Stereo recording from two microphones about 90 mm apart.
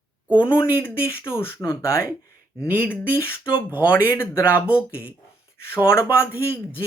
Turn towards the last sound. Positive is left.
turn(degrees=30)  # may be behind; listen again after turning